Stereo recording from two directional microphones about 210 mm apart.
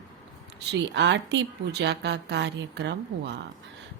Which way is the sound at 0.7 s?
55° right (ahead or behind).